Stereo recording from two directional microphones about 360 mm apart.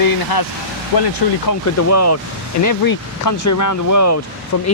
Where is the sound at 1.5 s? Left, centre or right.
Left.